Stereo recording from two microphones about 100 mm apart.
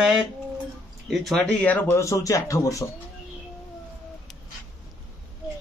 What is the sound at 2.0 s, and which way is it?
Speech, 30° left (ahead or behind).